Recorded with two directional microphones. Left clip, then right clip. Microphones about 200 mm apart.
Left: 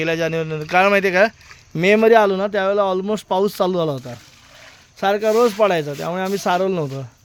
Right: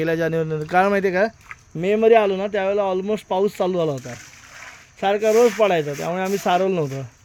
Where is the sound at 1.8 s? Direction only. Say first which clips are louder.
Left 3 dB; 30° left (ahead or behind); by 7.0 s 10° left (ahead or behind).